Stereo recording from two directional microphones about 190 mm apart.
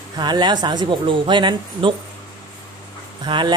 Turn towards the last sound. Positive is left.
turn(degrees=-25)  # may be behind; listen again after turning